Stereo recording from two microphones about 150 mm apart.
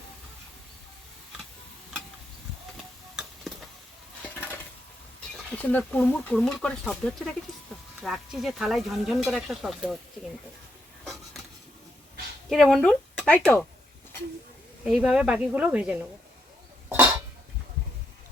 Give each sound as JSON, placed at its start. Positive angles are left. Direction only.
{"t": 3.5, "sound": "a sound", "side_deg": 0}
{"t": 4.2, "sound": "stir", "side_deg": 10}
{"t": 5.5, "sound": "speech", "side_deg": 10}
{"t": 8.0, "sound": "speech", "side_deg": 0}
{"t": 11.0, "sound": "a sound", "side_deg": 0}
{"t": 12.5, "sound": "speech", "side_deg": 0}
{"t": 14.8, "sound": "speech", "side_deg": -5}
{"t": 16.9, "sound": "cough", "side_deg": -10}